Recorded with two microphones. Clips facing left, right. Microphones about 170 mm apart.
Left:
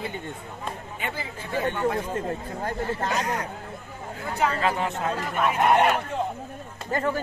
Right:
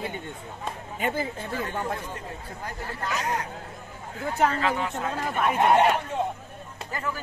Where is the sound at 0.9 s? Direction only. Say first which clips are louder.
Right 5 dB; 40° right (ahead or behind).